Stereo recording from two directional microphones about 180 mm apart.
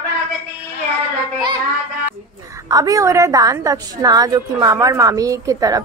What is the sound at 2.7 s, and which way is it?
A woman's voice, 20° right (ahead or behind).